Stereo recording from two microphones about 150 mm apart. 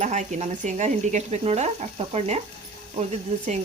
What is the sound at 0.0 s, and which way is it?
Speech, 55° right (ahead or behind).